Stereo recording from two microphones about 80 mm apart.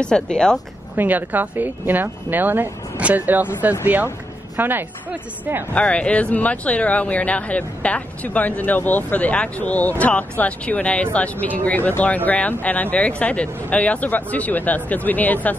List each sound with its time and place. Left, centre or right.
0.0 s speech: centre
0.9 s a woman's voice: right
5.8 s speech: centre